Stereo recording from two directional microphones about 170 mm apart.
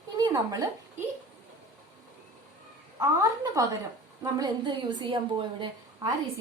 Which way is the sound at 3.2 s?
20° right (ahead or behind).